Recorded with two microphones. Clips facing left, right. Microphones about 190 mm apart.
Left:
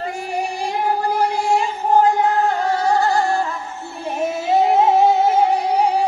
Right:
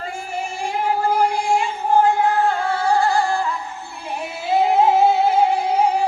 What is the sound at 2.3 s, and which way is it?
Singing, 40° left (ahead or behind).